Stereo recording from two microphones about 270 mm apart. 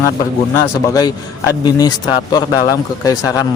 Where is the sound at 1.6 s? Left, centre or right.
Centre.